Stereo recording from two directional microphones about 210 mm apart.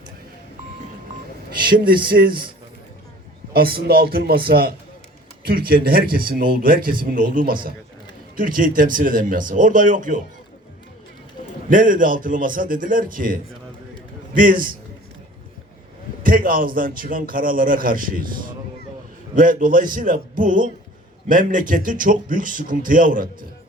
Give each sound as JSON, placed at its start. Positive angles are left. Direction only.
{"t": 1.7, "sound": "speech", "side_deg": -45}
{"t": 3.5, "sound": "a man's voice", "side_deg": -45}
{"t": 11.7, "sound": "a man's voice", "side_deg": -40}
{"t": 16.2, "sound": "a man's voice", "side_deg": -40}